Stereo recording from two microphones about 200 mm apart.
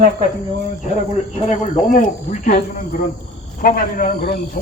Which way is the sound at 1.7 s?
40° left (ahead or behind).